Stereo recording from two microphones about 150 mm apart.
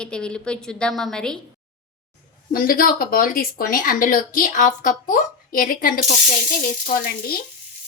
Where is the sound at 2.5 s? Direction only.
70° left (ahead or behind).